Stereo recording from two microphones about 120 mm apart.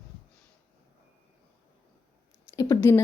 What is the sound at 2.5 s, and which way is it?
Speech, 25° left (ahead or behind).